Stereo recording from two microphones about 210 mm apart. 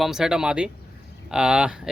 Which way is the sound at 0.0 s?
Centre (ahead or behind).